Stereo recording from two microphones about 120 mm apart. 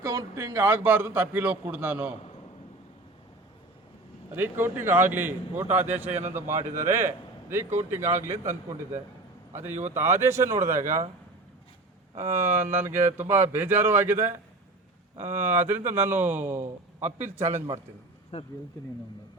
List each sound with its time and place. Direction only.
0.0 s speech: 30° right (ahead or behind)
0.7 s a man's voice: 15° right (ahead or behind)
4.4 s a man's voice: 20° right (ahead or behind)
9.9 s speech: 20° right (ahead or behind)
12.1 s speech: 25° right (ahead or behind)
18.3 s speech: 60° left (ahead or behind)